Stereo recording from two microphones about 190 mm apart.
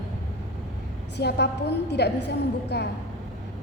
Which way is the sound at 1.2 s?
60° left (ahead or behind).